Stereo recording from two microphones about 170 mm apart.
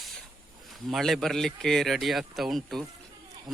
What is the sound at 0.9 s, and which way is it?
Speech, centre (ahead or behind).